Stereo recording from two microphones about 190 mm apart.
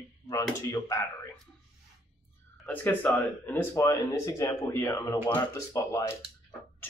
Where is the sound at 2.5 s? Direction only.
10° left (ahead or behind).